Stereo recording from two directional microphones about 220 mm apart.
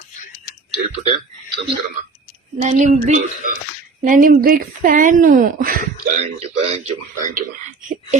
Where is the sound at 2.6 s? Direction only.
35° right (ahead or behind).